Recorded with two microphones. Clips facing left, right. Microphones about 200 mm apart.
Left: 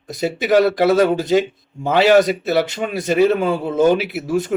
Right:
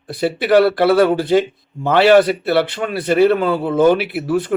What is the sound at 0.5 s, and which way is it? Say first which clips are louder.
Speech: right 2 dB; 20° left (ahead or behind).